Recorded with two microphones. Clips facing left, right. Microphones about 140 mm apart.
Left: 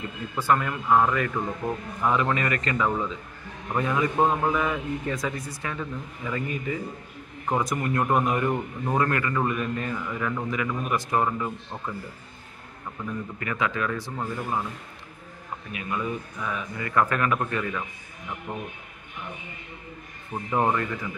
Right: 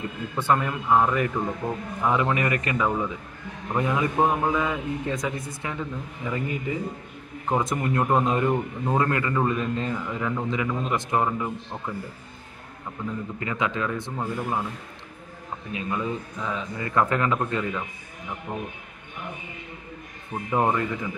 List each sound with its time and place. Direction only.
0.4 s a man's voice: 20° right (ahead or behind)
13.0 s a man's voice: 20° right (ahead or behind)
15.7 s a man's voice: 25° right (ahead or behind)
20.5 s speech: 10° right (ahead or behind)